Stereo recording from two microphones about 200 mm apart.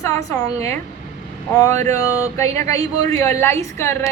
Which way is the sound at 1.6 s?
15° left (ahead or behind).